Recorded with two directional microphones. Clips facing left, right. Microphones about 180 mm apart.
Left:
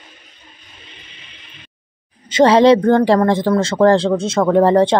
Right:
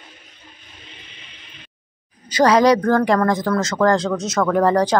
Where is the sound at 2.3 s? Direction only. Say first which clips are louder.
Left 4 dB; 25° left (ahead or behind).